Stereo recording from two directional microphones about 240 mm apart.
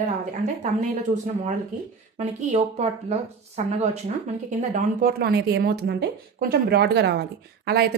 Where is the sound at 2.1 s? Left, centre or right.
Right.